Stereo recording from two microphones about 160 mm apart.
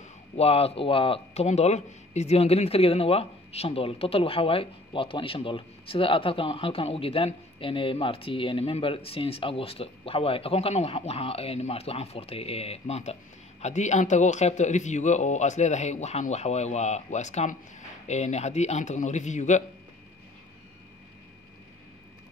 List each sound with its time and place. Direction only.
0.0 s a man's voice: 40° left (ahead or behind)